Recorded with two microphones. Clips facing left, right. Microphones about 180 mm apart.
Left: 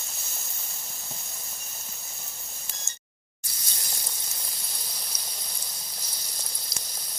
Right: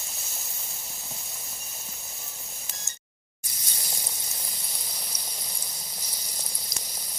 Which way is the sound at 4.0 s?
5° right (ahead or behind).